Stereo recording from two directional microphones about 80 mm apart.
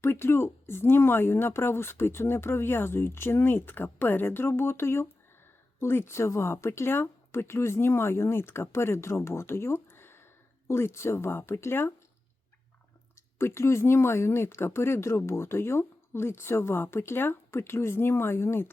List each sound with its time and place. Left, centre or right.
0.0 s speech: left
13.4 s speech: left